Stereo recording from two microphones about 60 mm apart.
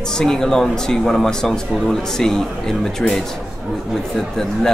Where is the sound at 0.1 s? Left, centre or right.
Centre.